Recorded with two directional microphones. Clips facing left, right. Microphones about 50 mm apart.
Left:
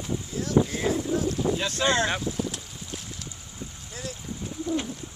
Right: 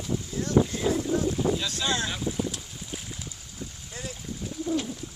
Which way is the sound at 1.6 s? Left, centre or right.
Left.